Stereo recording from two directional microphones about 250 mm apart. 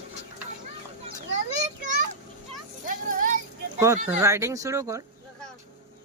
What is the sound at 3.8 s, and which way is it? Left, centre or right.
Speech, centre.